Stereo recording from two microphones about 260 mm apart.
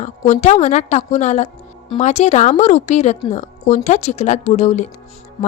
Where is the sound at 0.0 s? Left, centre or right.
Left.